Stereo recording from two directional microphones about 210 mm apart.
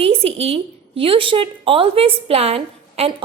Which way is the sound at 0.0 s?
30° right (ahead or behind).